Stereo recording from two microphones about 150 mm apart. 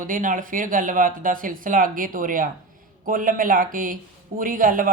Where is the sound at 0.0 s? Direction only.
60° right (ahead or behind).